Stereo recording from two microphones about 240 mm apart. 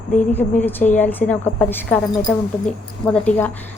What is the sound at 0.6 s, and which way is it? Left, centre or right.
A woman's voice, centre.